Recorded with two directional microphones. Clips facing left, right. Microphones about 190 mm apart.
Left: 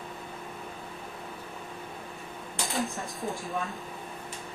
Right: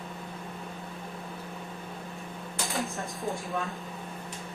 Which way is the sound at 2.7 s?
Centre (ahead or behind).